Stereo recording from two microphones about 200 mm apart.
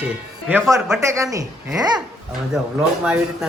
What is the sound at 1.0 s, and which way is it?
Speech, 15° right (ahead or behind).